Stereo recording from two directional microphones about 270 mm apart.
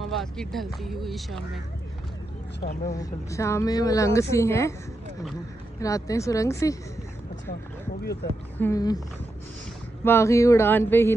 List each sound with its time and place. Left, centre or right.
0.1 s speech: centre
2.6 s speech: left
2.9 s speech: centre
5.8 s speech: centre
8.0 s speech: left
8.5 s speech: centre
10.0 s speech: centre